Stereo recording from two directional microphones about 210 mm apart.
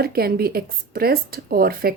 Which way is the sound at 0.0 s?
45° right (ahead or behind).